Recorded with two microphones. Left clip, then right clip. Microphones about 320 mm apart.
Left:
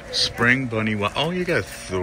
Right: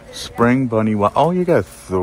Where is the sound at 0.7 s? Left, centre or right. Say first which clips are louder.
Right 7 dB; centre.